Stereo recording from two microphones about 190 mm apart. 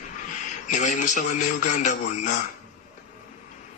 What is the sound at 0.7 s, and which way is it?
Speech, 40° left (ahead or behind).